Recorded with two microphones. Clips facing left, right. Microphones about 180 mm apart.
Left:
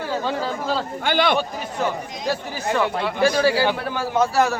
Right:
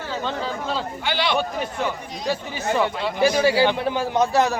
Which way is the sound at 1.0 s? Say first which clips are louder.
Left 4 dB; 50° left (ahead or behind).